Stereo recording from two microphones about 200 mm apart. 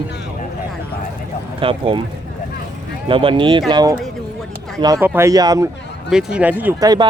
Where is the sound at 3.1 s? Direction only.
25° right (ahead or behind).